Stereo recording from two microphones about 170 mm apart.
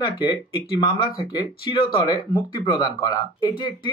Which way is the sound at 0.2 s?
30° left (ahead or behind).